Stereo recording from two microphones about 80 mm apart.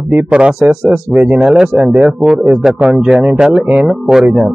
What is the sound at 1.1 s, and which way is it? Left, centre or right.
Speech, centre.